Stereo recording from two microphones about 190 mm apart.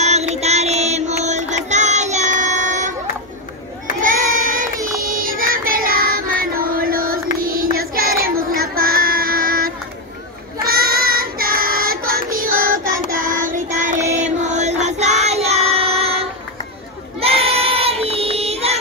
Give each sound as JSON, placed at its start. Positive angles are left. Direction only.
{"t": 0.0, "sound": "music", "side_deg": -35}
{"t": 4.0, "sound": "child singing", "side_deg": -45}